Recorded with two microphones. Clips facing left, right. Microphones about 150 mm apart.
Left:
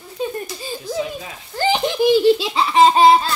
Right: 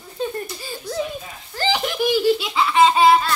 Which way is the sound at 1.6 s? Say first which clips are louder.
Left 4 dB; 20° left (ahead or behind).